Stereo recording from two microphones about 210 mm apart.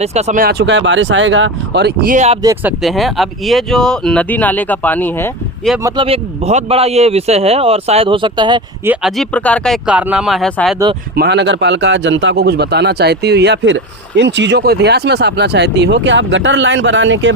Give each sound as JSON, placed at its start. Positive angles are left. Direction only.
{"t": 0.0, "sound": "speech", "side_deg": -30}
{"t": 0.6, "sound": "a man's voice", "side_deg": -60}
{"t": 2.1, "sound": "speech", "side_deg": -30}
{"t": 2.4, "sound": "speech", "side_deg": -15}
{"t": 2.8, "sound": "speech", "side_deg": 0}
{"t": 5.8, "sound": "a man's voice", "side_deg": -25}
{"t": 8.8, "sound": "speech", "side_deg": -5}
{"t": 11.1, "sound": "a man's voice", "side_deg": -50}